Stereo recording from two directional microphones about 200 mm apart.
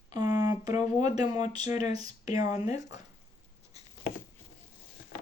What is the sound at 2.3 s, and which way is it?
Speech, 20° right (ahead or behind).